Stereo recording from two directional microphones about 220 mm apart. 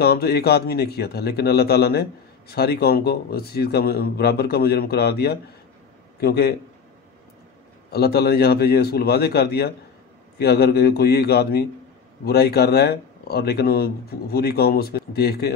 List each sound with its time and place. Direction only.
0.0 s a man's voice: 45° left (ahead or behind)
7.9 s a man's voice: 45° left (ahead or behind)